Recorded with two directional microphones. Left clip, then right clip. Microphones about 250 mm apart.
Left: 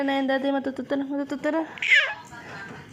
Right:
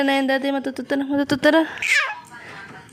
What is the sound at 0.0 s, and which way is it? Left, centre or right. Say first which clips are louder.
Speech: right 5 dB; right.